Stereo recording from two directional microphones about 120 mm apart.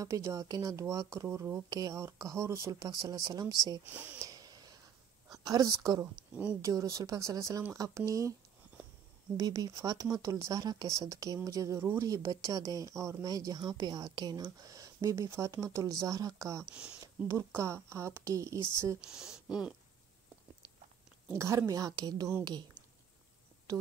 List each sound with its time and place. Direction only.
0.0 s speech: 25° right (ahead or behind)
1.7 s speech: 30° right (ahead or behind)
3.8 s speech: 15° right (ahead or behind)
4.2 s a sound: 30° right (ahead or behind)
5.3 s speech: 30° right (ahead or behind)
6.3 s speech: 10° right (ahead or behind)
6.6 s speech: 25° right (ahead or behind)
9.4 s speech: 30° right (ahead or behind)
17.0 s a sound: 25° right (ahead or behind)
17.6 s speech: 20° right (ahead or behind)
18.9 s speech: 5° right (ahead or behind)
21.3 s speech: 25° right (ahead or behind)